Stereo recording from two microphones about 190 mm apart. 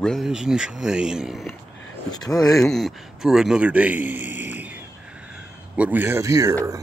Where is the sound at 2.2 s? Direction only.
20° left (ahead or behind).